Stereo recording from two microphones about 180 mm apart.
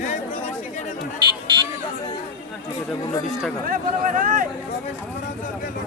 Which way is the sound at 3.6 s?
50° right (ahead or behind).